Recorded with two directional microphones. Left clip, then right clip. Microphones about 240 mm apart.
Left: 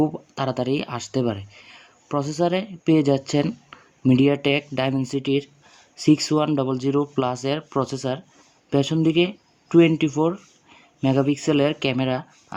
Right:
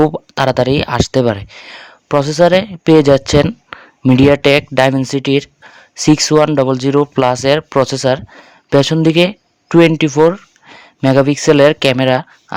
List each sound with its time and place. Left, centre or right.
0.0 s speech: right